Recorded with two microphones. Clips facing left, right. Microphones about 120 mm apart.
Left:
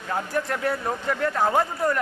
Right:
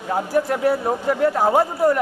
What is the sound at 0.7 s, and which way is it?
Speech, 30° right (ahead or behind).